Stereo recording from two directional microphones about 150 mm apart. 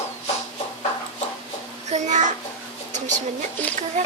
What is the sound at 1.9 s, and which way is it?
Speech, 50° right (ahead or behind).